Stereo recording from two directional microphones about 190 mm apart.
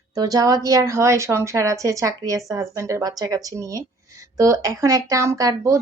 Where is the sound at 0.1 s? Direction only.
20° right (ahead or behind).